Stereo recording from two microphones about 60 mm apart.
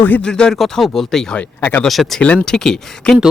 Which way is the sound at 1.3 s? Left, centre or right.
Left.